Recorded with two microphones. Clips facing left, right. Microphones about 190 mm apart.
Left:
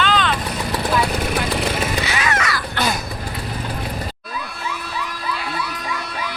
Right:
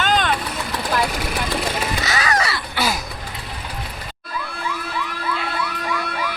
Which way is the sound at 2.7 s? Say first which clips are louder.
Even; 5° right (ahead or behind).